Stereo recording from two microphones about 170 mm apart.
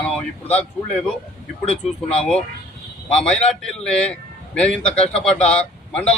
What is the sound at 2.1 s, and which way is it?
A man's voice, 5° left (ahead or behind).